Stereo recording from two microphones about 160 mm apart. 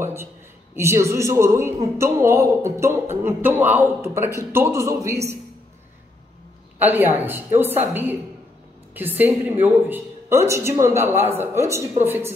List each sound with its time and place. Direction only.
0.0 s a man's voice: 15° right (ahead or behind)
6.8 s speech: 10° right (ahead or behind)